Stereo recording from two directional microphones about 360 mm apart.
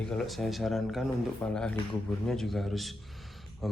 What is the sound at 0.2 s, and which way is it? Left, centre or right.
Speech, centre.